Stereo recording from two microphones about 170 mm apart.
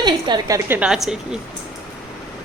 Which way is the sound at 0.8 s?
5° right (ahead or behind).